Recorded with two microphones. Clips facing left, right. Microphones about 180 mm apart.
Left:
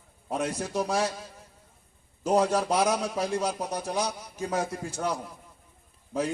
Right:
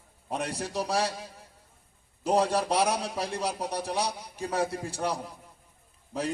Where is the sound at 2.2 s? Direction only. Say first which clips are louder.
Left 1 dB; 30° right (ahead or behind).